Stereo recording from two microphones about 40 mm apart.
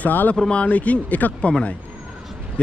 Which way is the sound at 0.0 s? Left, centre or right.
Left.